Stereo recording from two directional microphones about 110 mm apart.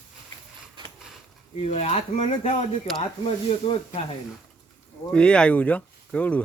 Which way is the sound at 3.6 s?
60° left (ahead or behind).